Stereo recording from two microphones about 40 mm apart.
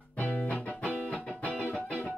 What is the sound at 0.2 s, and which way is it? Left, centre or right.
Music, left.